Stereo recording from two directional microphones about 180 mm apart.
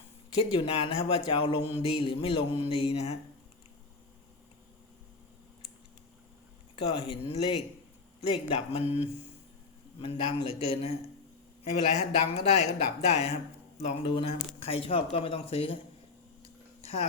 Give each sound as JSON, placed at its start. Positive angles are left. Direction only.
{"t": 0.3, "sound": "speech", "side_deg": 30}
{"t": 6.7, "sound": "speech", "side_deg": 30}
{"t": 16.4, "sound": "a sound", "side_deg": 35}